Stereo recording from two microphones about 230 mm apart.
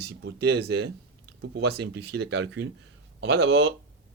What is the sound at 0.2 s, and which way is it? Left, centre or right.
Speech, right.